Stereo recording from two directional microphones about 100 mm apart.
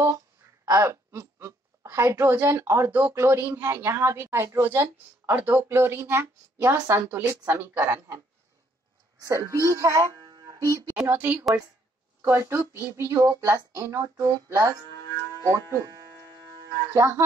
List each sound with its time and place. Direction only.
0.7 s a woman's voice: 30° right (ahead or behind)
9.2 s a woman's voice: 30° right (ahead or behind)
10.2 s music: 40° right (ahead or behind)
11.1 s a woman's voice: 20° right (ahead or behind); by 15.9 s 35° right (ahead or behind)
16.9 s a woman's voice: 30° right (ahead or behind)